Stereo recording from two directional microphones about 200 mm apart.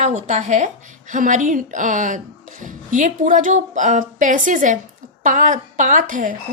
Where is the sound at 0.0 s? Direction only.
35° right (ahead or behind).